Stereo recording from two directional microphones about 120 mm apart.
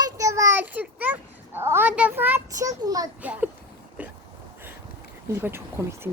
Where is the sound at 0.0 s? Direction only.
25° right (ahead or behind).